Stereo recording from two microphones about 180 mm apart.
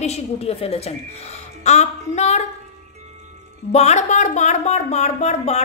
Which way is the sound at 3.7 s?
40° left (ahead or behind).